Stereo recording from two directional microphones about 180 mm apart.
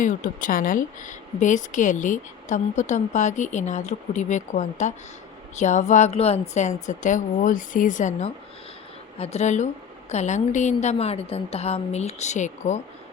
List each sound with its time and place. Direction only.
0.0 s a woman's voice: 45° left (ahead or behind)